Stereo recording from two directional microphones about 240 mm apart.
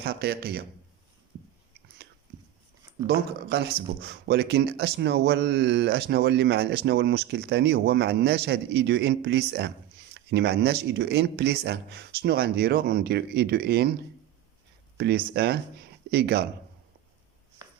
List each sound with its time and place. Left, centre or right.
0.0 s a man's voice: right
3.1 s speech: right
14.9 s speech: right
17.6 s chopping: centre